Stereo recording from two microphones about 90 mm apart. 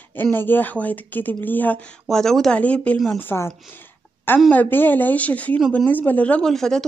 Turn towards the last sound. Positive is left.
turn(degrees=5)  # may be behind; listen again after turning